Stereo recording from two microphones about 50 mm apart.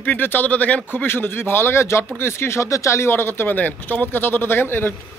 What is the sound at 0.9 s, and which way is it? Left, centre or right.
Speech, left.